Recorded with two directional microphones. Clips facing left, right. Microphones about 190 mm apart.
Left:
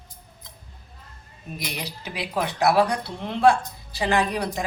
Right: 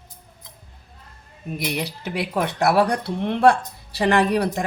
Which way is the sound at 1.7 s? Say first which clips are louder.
Right 6 dB; 55° right (ahead or behind).